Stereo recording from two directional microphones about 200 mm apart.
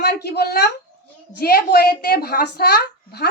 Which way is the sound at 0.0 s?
55° left (ahead or behind).